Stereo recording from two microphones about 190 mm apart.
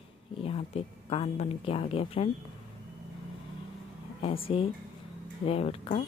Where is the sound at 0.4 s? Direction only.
30° left (ahead or behind).